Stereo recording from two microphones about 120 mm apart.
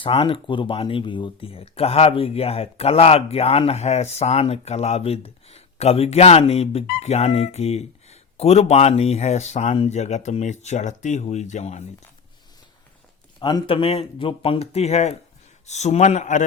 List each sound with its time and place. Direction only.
0.0 s speech: 45° left (ahead or behind); by 11.8 s 75° left (ahead or behind)
13.4 s speech: 40° left (ahead or behind); by 16.4 s 85° left